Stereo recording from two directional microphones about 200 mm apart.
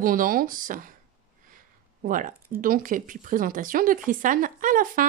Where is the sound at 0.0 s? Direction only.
45° right (ahead or behind).